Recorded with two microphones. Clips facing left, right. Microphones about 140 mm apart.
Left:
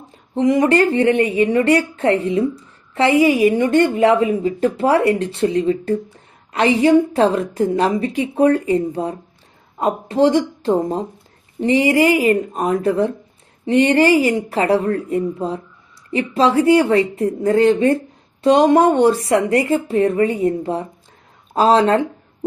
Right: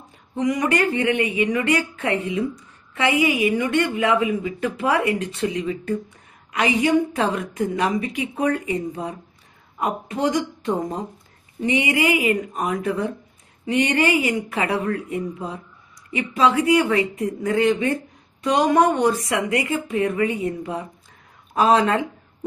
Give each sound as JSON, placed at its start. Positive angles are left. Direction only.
{"t": 0.3, "sound": "a woman's voice", "side_deg": 30}